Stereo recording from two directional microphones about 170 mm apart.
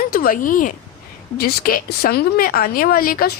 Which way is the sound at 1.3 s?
65° left (ahead or behind).